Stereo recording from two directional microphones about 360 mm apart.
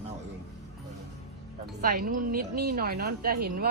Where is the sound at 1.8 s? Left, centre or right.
Right.